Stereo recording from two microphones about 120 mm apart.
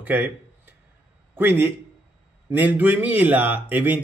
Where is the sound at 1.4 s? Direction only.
15° right (ahead or behind).